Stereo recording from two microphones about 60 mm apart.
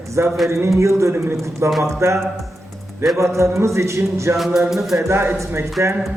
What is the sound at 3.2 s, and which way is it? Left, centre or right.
A man's voice, right.